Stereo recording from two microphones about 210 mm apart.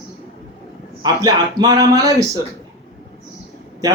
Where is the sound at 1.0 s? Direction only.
20° right (ahead or behind).